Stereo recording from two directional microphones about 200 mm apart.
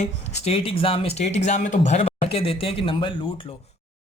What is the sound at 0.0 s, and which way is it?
A man's voice, 30° left (ahead or behind).